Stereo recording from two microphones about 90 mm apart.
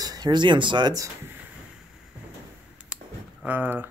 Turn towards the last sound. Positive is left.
turn(degrees=-20)  # may be behind; listen again after turning